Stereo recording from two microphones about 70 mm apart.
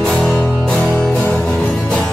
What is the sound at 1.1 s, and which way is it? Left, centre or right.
Music, left.